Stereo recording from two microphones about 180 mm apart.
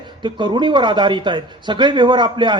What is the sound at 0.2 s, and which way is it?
A man's voice, 25° right (ahead or behind).